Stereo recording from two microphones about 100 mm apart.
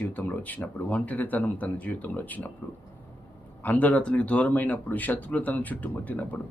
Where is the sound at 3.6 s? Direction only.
15° left (ahead or behind).